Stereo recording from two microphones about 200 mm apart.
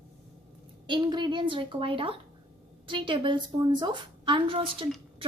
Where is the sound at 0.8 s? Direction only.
25° right (ahead or behind).